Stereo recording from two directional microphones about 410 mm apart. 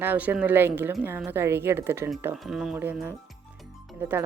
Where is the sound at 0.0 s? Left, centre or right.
Centre.